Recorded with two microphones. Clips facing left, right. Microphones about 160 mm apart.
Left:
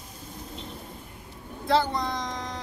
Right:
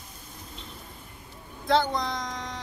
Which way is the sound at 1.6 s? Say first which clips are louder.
Even; 5° left (ahead or behind).